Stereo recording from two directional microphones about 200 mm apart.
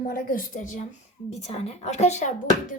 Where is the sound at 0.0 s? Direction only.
45° left (ahead or behind).